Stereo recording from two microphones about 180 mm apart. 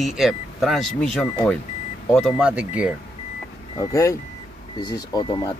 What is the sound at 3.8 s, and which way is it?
Speech, 20° left (ahead or behind).